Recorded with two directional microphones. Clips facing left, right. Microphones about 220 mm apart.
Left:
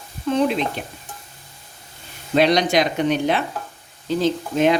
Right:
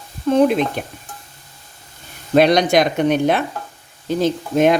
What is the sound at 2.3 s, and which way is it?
Speech, 50° right (ahead or behind).